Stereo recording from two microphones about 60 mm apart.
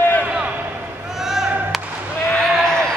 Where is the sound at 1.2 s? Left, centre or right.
Centre.